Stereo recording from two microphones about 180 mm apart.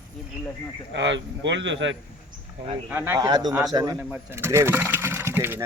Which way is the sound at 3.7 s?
20° right (ahead or behind).